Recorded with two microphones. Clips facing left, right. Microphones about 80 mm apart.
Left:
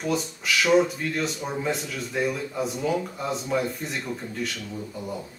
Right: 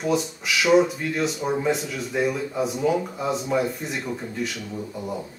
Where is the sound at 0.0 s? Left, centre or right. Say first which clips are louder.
Right 3 dB; centre.